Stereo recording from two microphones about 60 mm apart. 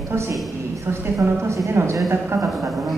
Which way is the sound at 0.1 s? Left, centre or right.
Right.